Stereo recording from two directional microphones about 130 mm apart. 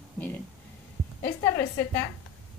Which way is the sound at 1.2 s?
20° left (ahead or behind).